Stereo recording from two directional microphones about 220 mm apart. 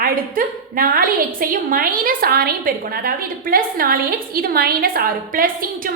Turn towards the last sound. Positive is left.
turn(degrees=-40)  # may be behind; listen again after turning